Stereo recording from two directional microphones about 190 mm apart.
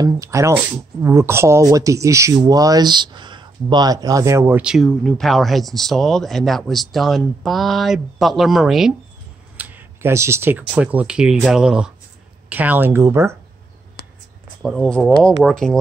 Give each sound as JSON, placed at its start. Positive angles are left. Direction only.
{"t": 0.0, "sound": "speech", "side_deg": -15}
{"t": 14.6, "sound": "speech", "side_deg": 0}